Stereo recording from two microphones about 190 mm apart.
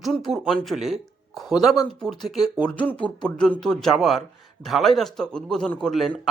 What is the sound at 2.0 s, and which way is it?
A man's voice, centre (ahead or behind).